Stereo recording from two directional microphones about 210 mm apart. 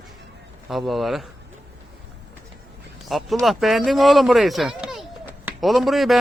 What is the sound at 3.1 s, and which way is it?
Speech, centre (ahead or behind).